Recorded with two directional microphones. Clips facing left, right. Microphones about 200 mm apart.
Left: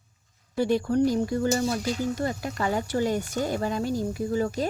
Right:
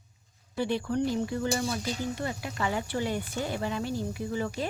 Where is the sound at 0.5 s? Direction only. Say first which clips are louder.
Left 6 dB; 45° left (ahead or behind).